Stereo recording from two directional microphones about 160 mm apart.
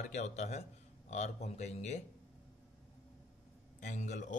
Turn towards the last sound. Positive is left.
turn(degrees=50)  # may be behind; listen again after turning